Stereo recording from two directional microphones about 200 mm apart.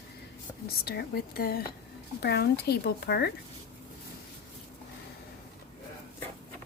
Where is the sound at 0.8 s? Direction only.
50° left (ahead or behind).